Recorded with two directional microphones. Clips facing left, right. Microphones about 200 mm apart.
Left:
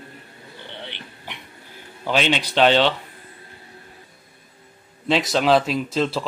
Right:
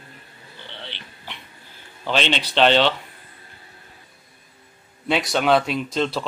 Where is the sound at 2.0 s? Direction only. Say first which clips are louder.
Left 2 dB; 10° left (ahead or behind).